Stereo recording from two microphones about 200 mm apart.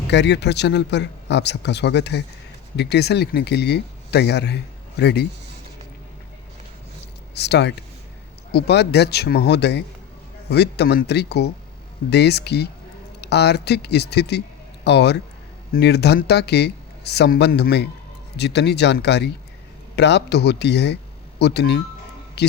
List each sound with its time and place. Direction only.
0.1 s speech: 60° left (ahead or behind)
7.3 s speech: 55° left (ahead or behind)
22.4 s a sound: 55° left (ahead or behind)